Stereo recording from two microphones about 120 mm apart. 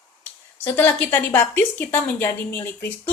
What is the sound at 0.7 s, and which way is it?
A woman's voice, 15° left (ahead or behind).